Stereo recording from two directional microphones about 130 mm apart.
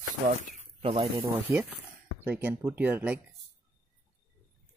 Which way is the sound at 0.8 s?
45° right (ahead or behind).